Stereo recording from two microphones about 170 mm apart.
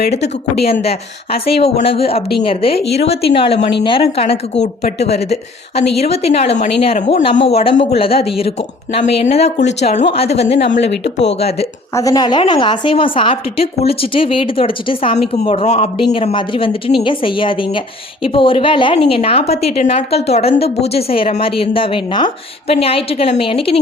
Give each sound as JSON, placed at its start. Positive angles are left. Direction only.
{"t": 0.8, "sound": "a woman's voice", "side_deg": 35}
{"t": 10.6, "sound": "speech", "side_deg": 90}
{"t": 11.9, "sound": "a woman's voice", "side_deg": 20}